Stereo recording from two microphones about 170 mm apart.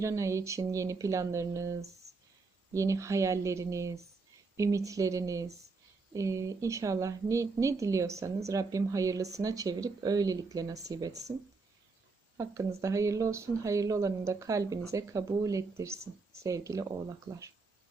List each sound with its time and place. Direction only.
0.0 s a woman's voice: 20° right (ahead or behind)
12.4 s a woman's voice: 20° right (ahead or behind)